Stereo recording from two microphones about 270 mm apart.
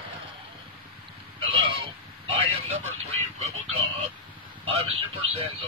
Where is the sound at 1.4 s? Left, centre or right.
Centre.